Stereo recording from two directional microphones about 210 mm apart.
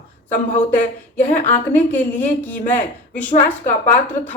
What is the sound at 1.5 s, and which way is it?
A woman's voice, 10° left (ahead or behind).